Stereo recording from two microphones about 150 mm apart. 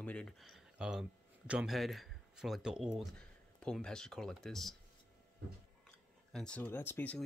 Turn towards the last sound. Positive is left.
turn(degrees=10)  # may be behind; listen again after turning